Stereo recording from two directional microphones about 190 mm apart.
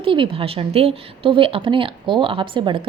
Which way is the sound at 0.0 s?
25° right (ahead or behind).